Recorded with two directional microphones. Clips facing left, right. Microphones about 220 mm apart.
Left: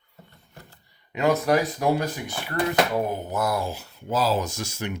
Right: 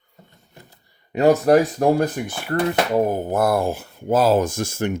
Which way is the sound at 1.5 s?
45° right (ahead or behind).